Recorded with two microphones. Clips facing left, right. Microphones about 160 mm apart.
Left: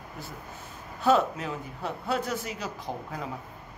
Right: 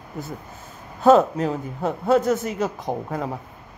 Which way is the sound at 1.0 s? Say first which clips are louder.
Right 8 dB; 45° right (ahead or behind).